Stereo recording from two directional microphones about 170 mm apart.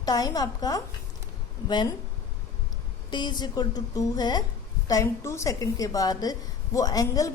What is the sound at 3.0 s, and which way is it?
A woman's voice, 25° left (ahead or behind).